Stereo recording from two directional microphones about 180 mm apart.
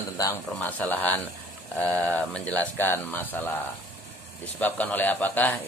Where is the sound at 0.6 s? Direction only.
10° left (ahead or behind).